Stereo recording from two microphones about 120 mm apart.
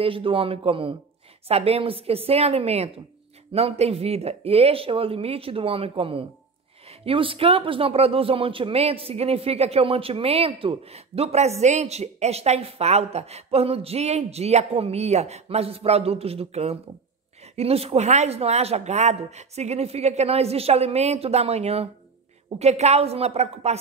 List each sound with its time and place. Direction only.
0.0 s speech: 50° right (ahead or behind)